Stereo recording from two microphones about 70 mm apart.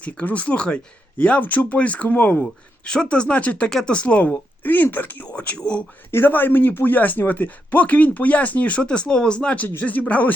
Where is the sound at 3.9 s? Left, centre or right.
Centre.